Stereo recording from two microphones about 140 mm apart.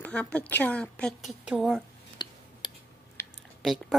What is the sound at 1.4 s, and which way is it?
Speech, 5° right (ahead or behind).